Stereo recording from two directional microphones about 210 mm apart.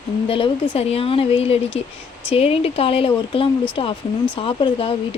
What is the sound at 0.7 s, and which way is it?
Speech, 30° left (ahead or behind).